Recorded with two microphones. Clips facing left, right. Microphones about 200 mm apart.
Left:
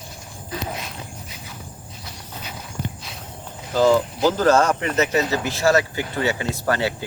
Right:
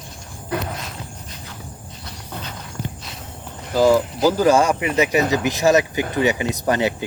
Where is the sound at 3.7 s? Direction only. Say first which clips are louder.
Right 1 dB; 10° right (ahead or behind).